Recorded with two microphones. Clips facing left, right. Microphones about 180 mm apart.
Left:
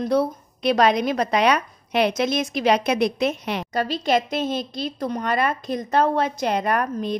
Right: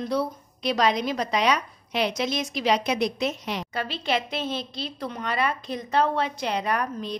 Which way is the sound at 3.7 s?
40° left (ahead or behind).